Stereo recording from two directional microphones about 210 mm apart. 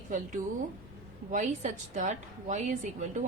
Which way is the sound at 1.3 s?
35° right (ahead or behind).